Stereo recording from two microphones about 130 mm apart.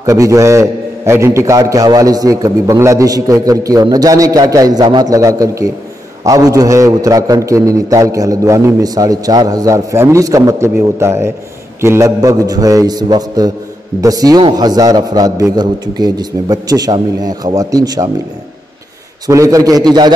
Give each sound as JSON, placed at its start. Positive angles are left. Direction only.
{"t": 0.0, "sound": "a man's voice", "side_deg": -25}
{"t": 19.2, "sound": "a man's voice", "side_deg": -25}